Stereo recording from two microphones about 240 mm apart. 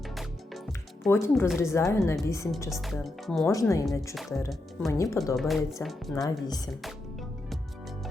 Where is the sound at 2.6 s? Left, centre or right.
Centre.